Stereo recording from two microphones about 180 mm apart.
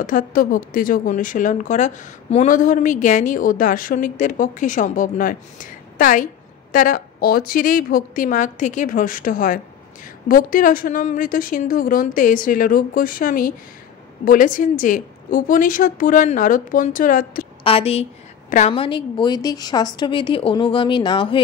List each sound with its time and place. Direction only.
0.0 s a woman's voice: 50° left (ahead or behind)
17.6 s a woman's voice: 35° left (ahead or behind)